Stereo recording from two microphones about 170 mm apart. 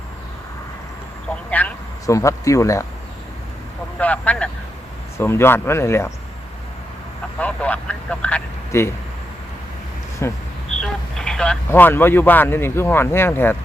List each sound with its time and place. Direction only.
1.5 s a sound: 10° left (ahead or behind)
3.9 s vehicle: 10° left (ahead or behind)
5.1 s speech: 15° left (ahead or behind)
7.3 s speech: 10° left (ahead or behind)
10.2 s speech: 15° left (ahead or behind)
10.8 s speech: 5° left (ahead or behind)